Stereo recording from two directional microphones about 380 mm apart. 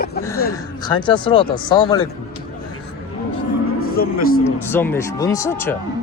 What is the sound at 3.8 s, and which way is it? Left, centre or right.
Speech, left.